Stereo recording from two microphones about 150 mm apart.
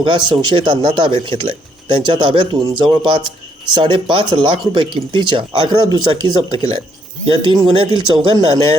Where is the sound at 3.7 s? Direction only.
30° right (ahead or behind).